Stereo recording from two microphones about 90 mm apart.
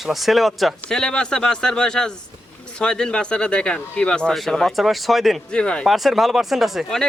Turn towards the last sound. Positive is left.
turn(degrees=0)  # may be behind; listen again after turning